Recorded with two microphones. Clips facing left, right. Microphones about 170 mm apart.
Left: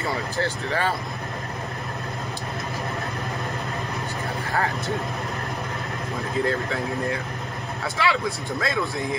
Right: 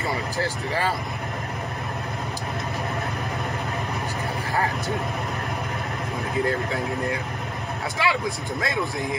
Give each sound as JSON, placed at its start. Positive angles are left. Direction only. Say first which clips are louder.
{"t": 8.0, "sound": "speech", "louder": "left 1 dB", "side_deg": -15}